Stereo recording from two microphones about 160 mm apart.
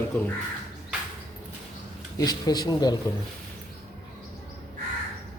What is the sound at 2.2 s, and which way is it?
Speech, 25° left (ahead or behind).